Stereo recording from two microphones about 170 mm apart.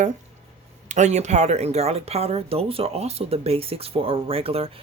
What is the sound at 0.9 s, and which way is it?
Speech, 45° right (ahead or behind).